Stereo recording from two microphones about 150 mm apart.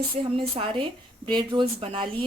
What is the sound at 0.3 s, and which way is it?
A woman's voice, 35° right (ahead or behind).